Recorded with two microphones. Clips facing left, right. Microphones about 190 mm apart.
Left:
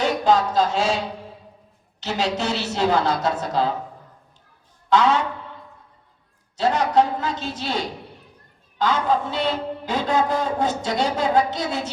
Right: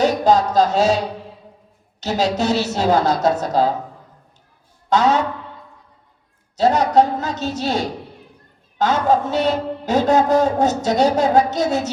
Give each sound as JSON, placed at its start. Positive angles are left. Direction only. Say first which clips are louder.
{"t": 0.0, "sound": "music", "louder": "right 4 dB", "side_deg": -40}
{"t": 2.0, "sound": "a woman's voice", "louder": "right 5 dB", "side_deg": -40}
{"t": 4.9, "sound": "a woman's voice", "louder": "right 2 dB", "side_deg": -40}
{"t": 6.6, "sound": "a woman's voice", "louder": "right 4 dB", "side_deg": -40}